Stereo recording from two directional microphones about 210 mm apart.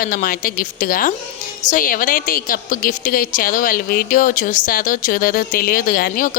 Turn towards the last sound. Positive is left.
turn(degrees=45)  # may be behind; listen again after turning